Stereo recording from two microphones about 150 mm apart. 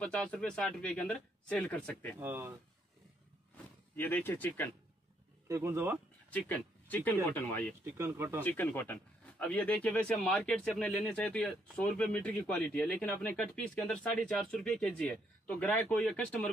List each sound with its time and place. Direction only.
0.0 s a man's voice: 5° left (ahead or behind)
2.1 s speech: 15° right (ahead or behind)
3.9 s a man's voice: 15° left (ahead or behind)
5.5 s speech: 15° right (ahead or behind)
6.3 s a man's voice: 10° left (ahead or behind)
7.8 s speech: 15° right (ahead or behind)
8.5 s a man's voice: 10° left (ahead or behind)